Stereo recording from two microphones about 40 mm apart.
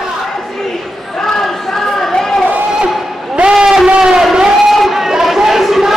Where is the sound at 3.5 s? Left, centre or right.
Centre.